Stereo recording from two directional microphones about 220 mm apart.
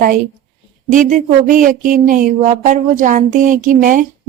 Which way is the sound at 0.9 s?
35° right (ahead or behind).